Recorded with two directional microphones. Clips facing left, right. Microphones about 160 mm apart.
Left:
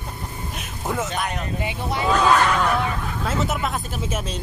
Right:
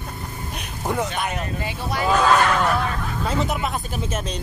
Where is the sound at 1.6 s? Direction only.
25° left (ahead or behind).